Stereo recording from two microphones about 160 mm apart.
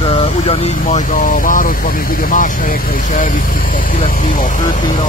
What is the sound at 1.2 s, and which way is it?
Speech, 60° left (ahead or behind).